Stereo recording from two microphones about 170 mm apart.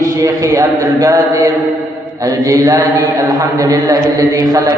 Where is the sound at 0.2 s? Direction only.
20° right (ahead or behind).